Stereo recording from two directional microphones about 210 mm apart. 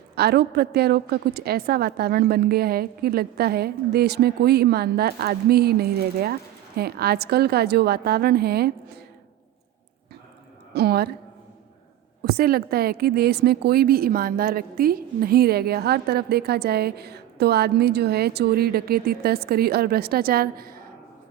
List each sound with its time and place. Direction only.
0.2 s a woman's voice: 50° right (ahead or behind)
10.8 s a woman's voice: 50° right (ahead or behind)
12.2 s a woman's voice: 45° right (ahead or behind)